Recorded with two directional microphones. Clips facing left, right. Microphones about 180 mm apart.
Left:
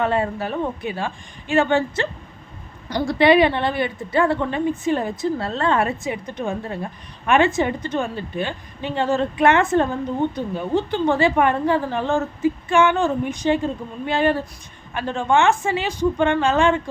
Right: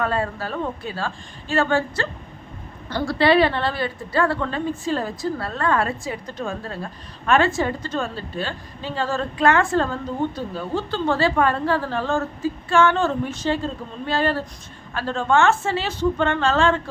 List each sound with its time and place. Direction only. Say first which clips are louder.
0.0 s a woman's voice: left 3 dB; 20° left (ahead or behind)